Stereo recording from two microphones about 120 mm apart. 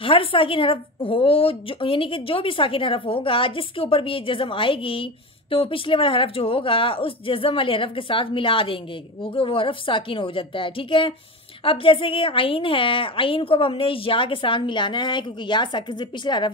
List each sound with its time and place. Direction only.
0.0 s a woman's voice: 45° left (ahead or behind)